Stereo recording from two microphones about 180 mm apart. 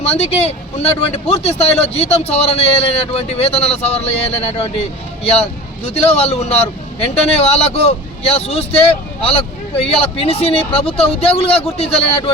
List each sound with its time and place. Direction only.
0.0 s speech: 35° left (ahead or behind)